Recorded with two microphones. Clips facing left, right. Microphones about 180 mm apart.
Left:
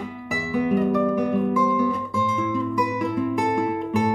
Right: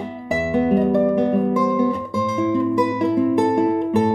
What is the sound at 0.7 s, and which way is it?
Music, 35° right (ahead or behind).